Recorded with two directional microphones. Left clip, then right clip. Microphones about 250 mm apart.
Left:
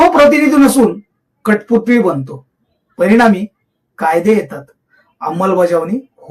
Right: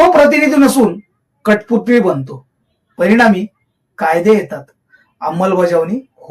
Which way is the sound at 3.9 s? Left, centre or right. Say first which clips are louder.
Right 1 dB; centre.